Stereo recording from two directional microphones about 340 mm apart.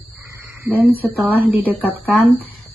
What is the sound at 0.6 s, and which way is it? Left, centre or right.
A woman's voice, centre.